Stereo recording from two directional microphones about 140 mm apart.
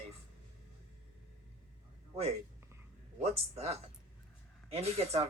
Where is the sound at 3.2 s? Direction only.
50° right (ahead or behind).